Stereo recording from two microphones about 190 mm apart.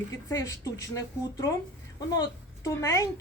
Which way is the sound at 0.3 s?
20° left (ahead or behind).